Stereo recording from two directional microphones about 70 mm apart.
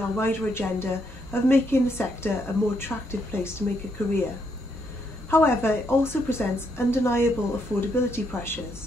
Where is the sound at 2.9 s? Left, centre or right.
Left.